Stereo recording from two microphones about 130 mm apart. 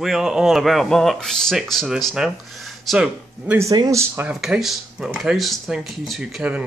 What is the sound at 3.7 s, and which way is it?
Speech, 25° right (ahead or behind).